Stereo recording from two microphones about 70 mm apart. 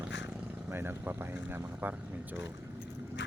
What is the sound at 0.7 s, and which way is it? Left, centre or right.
Speech, right.